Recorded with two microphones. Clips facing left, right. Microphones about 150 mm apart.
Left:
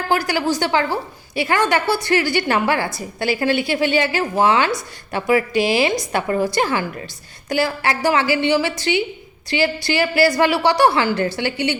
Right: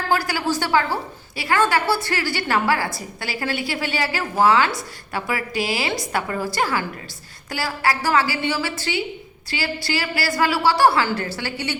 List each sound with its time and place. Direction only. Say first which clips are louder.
0.1 s a woman's voice: left 3 dB; 20° left (ahead or behind)
7.9 s a woman's voice: right 1 dB; 25° left (ahead or behind)